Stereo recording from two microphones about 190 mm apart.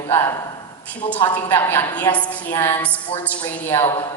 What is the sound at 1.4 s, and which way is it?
A woman's voice, 10° left (ahead or behind).